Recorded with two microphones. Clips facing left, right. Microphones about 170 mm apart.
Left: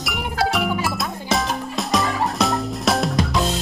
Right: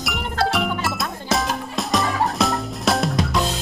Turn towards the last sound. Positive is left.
turn(degrees=0)  # may be behind; listen again after turning